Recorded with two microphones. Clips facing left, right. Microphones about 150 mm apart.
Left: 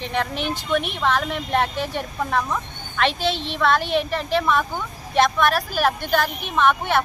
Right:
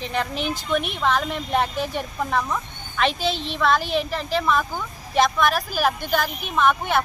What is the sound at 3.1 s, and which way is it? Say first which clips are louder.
Speech: left 1 dB; 40° right (ahead or behind).